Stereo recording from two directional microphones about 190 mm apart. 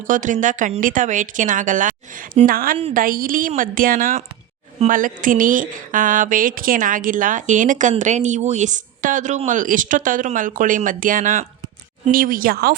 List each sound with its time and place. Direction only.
0.1 s speech: 40° right (ahead or behind)